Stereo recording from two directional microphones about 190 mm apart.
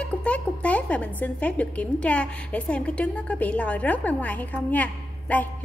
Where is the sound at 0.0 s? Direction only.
5° left (ahead or behind).